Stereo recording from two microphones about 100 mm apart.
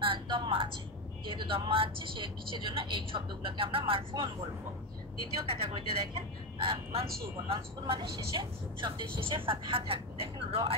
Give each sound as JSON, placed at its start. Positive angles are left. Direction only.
{"t": 0.0, "sound": "a sound", "side_deg": -60}
{"t": 1.2, "sound": "a man's voice", "side_deg": -60}
{"t": 5.5, "sound": "a man's voice", "side_deg": -70}